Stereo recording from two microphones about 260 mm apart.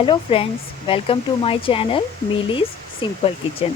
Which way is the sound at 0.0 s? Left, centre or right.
Left.